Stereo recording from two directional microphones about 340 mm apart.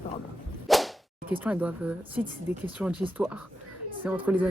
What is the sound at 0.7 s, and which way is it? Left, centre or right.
Whip, centre.